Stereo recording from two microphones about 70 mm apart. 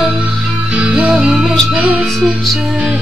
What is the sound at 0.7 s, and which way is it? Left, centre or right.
Music, centre.